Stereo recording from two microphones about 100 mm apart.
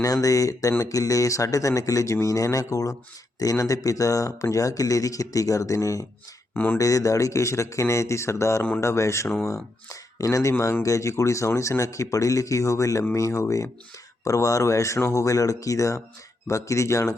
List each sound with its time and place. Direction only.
0.0 s speech: 35° left (ahead or behind)
6.5 s speech: 15° left (ahead or behind)
6.7 s speech: 35° left (ahead or behind)